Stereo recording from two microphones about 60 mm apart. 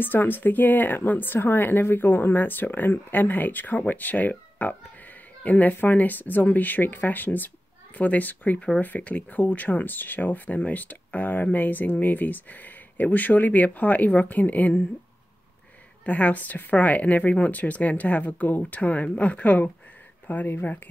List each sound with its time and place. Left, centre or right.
0.0 s a woman's voice: left
16.1 s a woman's voice: left